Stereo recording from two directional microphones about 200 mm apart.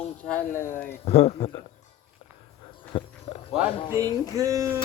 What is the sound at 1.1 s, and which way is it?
Speech, 35° left (ahead or behind).